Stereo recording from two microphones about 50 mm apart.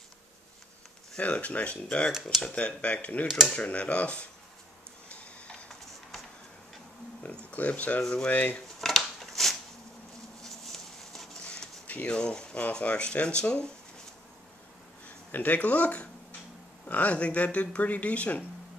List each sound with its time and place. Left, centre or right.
1.2 s speech: left
7.5 s speech: left
8.8 s a sound: centre
11.4 s a sound: centre
11.9 s speech: left
15.0 s speech: left